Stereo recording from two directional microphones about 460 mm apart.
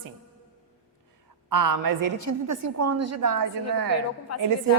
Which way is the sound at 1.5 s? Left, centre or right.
Right.